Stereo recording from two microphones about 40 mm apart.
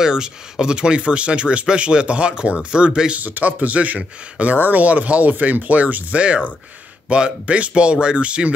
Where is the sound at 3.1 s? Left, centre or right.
Right.